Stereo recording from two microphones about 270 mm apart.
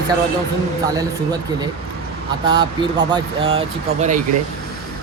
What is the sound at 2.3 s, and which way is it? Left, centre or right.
Speech, centre.